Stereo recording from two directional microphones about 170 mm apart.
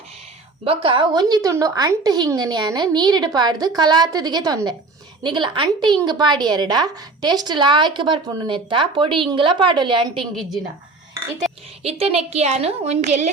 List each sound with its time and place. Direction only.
0.6 s a woman's voice: 30° right (ahead or behind)
11.8 s a woman's voice: 35° right (ahead or behind)